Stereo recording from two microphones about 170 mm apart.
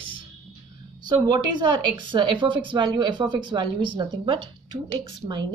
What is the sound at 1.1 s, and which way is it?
A woman's voice, 25° right (ahead or behind).